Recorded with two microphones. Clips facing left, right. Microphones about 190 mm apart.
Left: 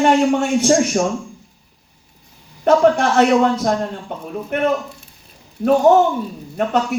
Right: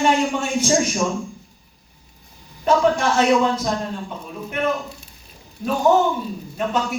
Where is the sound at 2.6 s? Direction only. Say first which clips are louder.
Left 4 dB; 65° left (ahead or behind).